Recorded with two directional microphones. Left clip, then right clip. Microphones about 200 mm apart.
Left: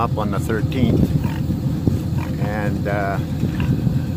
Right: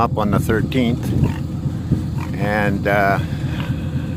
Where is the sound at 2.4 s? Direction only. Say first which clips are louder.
Right 7 dB; 40° right (ahead or behind).